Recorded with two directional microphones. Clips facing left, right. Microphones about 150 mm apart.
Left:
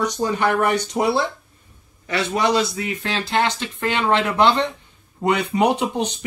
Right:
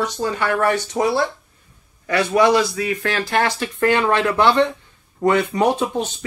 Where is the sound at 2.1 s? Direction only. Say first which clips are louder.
Right 5 dB; 20° left (ahead or behind).